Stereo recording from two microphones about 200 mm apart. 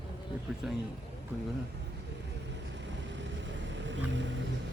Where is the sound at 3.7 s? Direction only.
65° right (ahead or behind).